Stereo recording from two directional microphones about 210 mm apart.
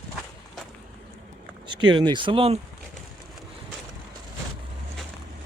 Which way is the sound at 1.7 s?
20° right (ahead or behind).